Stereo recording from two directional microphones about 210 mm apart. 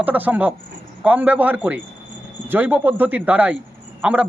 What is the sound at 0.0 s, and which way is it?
A man's voice, 10° right (ahead or behind).